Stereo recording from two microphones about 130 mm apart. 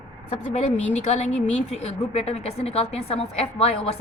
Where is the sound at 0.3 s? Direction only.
65° left (ahead or behind).